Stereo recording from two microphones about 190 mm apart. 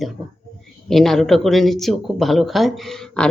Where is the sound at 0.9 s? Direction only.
Centre (ahead or behind).